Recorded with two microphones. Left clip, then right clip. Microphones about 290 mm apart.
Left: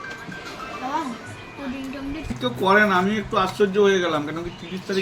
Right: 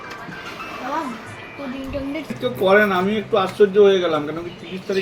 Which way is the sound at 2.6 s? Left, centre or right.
Left.